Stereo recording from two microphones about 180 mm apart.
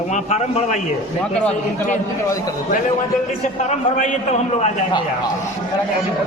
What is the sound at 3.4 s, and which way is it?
A man's voice, 40° left (ahead or behind).